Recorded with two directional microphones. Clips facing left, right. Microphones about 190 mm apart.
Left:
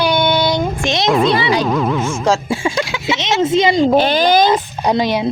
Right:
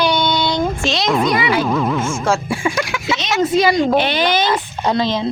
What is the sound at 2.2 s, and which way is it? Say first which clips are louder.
Speech: left 4 dB; 25° left (ahead or behind).